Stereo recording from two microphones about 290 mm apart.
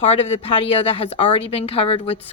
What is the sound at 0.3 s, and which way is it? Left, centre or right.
Speech, centre.